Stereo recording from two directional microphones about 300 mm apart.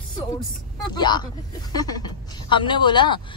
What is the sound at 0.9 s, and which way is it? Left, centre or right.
A woman's voice, centre.